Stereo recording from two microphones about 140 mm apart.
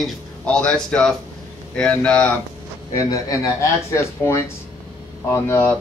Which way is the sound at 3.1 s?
20° left (ahead or behind).